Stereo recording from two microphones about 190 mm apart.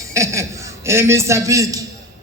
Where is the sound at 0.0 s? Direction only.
15° right (ahead or behind).